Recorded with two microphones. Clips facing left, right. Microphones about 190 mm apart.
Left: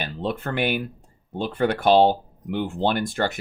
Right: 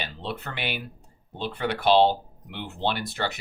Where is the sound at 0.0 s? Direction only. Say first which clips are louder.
Left 6 dB; 50° left (ahead or behind).